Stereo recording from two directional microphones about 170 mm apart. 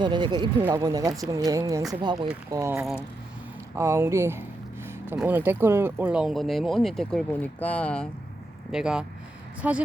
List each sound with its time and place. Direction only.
0.0 s speech: 25° right (ahead or behind)
2.7 s speech: 5° right (ahead or behind)
3.8 s speech: 15° right (ahead or behind); by 8.0 s 5° left (ahead or behind)
8.7 s speech: 5° right (ahead or behind)